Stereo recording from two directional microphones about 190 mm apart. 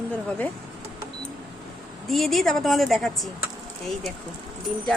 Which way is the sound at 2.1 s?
Centre (ahead or behind).